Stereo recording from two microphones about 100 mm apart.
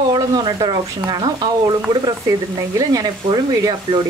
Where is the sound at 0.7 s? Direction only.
45° right (ahead or behind).